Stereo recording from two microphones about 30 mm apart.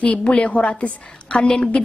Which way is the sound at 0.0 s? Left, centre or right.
Left.